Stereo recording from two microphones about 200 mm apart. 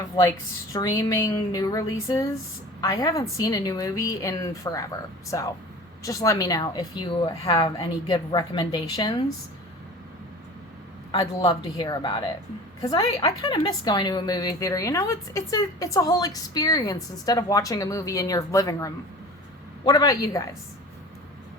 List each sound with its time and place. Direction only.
0.2 s a woman's voice: 15° left (ahead or behind)
11.1 s a woman's voice: 25° left (ahead or behind)